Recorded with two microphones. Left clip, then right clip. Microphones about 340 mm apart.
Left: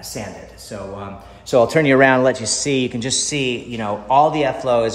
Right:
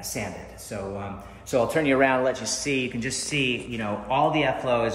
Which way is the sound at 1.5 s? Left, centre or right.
Left.